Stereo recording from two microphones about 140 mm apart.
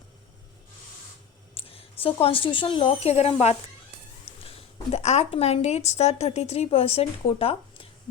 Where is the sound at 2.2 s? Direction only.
40° left (ahead or behind).